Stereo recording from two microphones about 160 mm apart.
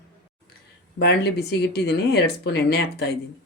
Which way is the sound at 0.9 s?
90° left.